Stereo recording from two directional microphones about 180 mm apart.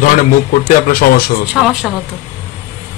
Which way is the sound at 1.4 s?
5° right (ahead or behind).